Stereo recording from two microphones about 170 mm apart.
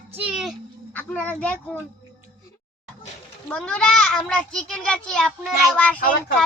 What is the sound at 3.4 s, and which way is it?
A child's voice, 5° left (ahead or behind).